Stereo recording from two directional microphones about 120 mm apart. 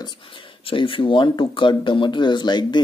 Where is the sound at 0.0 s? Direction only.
40° left (ahead or behind).